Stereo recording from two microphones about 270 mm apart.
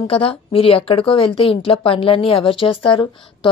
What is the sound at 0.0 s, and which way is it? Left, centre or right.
A woman's voice, left.